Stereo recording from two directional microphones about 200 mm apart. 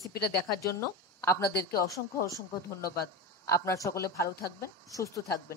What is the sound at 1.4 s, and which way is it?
Speech, 50° left (ahead or behind).